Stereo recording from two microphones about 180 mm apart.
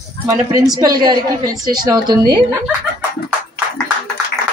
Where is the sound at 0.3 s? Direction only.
20° right (ahead or behind).